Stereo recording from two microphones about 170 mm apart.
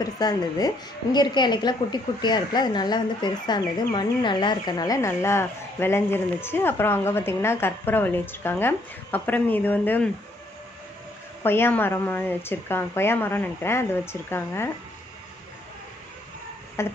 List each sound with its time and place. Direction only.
0.0 s a woman's voice: 20° left (ahead or behind)
11.4 s a woman's voice: 15° left (ahead or behind)
16.8 s a sound: 15° left (ahead or behind)